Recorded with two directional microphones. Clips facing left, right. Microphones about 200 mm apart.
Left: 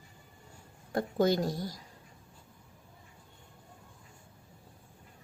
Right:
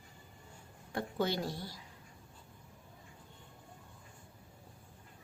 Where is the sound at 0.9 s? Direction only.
45° left (ahead or behind).